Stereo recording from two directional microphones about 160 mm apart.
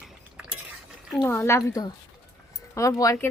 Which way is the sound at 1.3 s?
15° left (ahead or behind).